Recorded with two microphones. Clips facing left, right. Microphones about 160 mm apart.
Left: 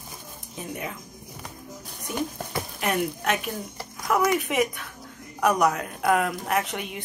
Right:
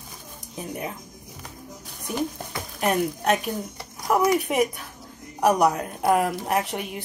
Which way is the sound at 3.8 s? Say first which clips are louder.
Right 1 dB; 25° right (ahead or behind).